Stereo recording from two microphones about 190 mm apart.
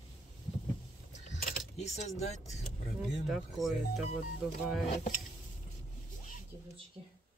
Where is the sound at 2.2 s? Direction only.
35° left (ahead or behind).